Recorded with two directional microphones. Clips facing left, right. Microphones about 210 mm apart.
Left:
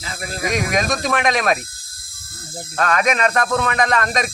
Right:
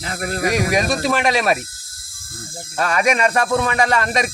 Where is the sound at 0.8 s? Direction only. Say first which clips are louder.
Right 1 dB; 10° right (ahead or behind).